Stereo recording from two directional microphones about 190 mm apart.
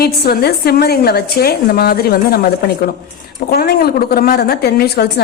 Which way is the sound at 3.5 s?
55° left (ahead or behind).